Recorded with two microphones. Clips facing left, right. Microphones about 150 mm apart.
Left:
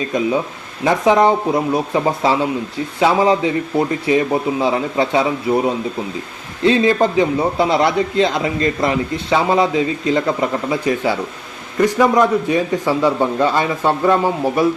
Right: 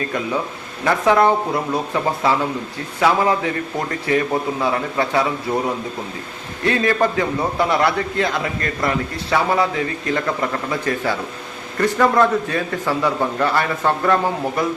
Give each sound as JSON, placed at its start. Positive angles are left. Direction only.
{"t": 0.0, "sound": "a man's voice", "side_deg": 15}